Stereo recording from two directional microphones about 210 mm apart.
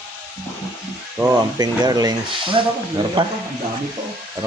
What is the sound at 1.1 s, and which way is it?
Speech, 10° right (ahead or behind).